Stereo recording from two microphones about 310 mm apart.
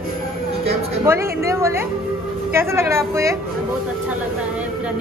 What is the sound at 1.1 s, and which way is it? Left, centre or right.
Speech, centre.